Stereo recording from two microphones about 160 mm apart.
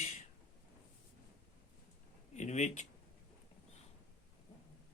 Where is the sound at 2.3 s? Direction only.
50° left (ahead or behind).